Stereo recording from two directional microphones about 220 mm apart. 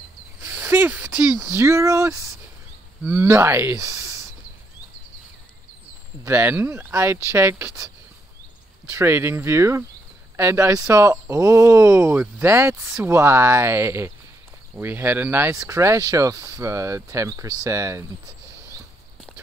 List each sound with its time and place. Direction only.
0.4 s speech: 10° right (ahead or behind)
6.2 s speech: 10° right (ahead or behind)